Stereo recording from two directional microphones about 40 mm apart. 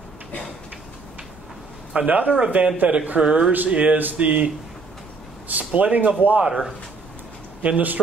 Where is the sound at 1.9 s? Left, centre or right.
Right.